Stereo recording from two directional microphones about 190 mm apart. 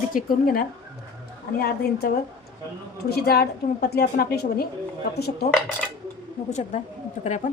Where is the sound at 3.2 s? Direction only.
55° left (ahead or behind).